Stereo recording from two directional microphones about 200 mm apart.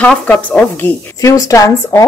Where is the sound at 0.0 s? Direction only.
5° left (ahead or behind).